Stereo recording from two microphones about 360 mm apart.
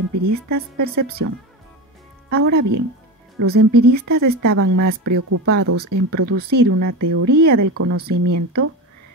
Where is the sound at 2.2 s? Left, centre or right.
Right.